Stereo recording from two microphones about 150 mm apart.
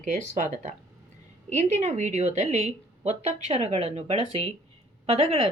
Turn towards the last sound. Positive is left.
turn(degrees=-40)  # may be behind; listen again after turning